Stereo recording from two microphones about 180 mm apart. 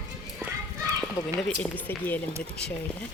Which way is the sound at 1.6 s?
10° left (ahead or behind).